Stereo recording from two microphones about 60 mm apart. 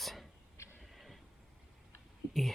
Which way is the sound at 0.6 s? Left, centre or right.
Left.